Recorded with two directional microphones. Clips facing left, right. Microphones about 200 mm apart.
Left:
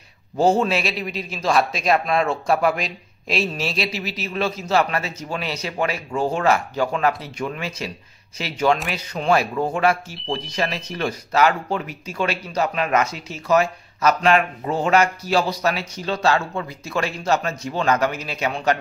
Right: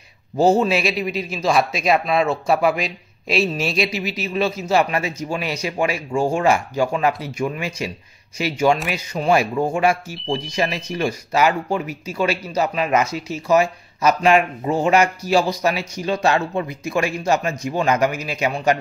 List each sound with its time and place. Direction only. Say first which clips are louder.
0.4 s speech: right 2 dB; 10° right (ahead or behind)
4.0 s a man's voice: right 3 dB; 40° left (ahead or behind)
4.3 s speech: right 2 dB; 10° right (ahead or behind)